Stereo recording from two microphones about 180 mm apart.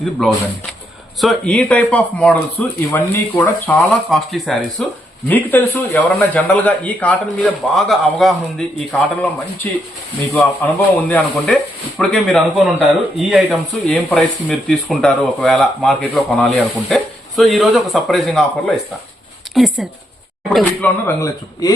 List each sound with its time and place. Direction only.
0.0 s a man's voice: centre (ahead or behind)
21.1 s a man's voice: 15° left (ahead or behind)